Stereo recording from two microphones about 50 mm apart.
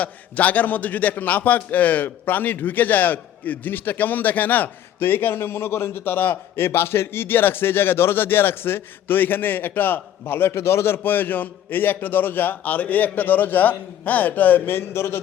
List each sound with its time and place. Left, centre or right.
0.0 s a man's voice: left
14.7 s a man's voice: left